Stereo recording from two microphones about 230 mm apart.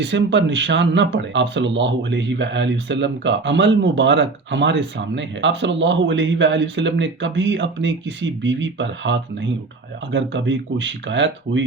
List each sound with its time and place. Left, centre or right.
0.0 s speech: right